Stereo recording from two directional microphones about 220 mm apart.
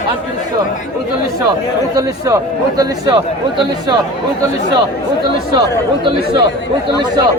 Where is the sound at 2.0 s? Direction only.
15° right (ahead or behind).